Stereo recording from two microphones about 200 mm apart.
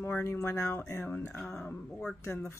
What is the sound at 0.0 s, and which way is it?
Speech, 10° left (ahead or behind).